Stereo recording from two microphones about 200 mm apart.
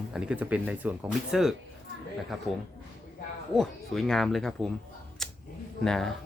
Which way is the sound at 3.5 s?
Centre (ahead or behind).